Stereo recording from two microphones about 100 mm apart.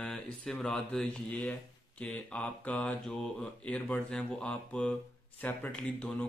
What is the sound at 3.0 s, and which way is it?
Speech, 5° left (ahead or behind).